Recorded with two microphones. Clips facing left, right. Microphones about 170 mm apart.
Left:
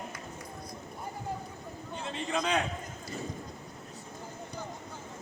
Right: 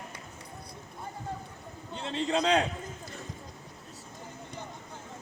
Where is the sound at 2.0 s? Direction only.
30° right (ahead or behind).